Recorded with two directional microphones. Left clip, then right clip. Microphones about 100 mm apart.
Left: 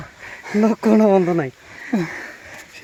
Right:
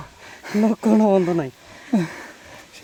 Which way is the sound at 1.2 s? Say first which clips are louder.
Left 2 dB; 35° left (ahead or behind).